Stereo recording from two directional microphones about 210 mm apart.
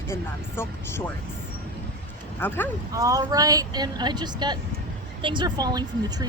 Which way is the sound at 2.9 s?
15° right (ahead or behind).